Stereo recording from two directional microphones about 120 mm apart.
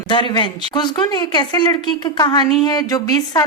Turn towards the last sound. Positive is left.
turn(degrees=30)  # may be behind; listen again after turning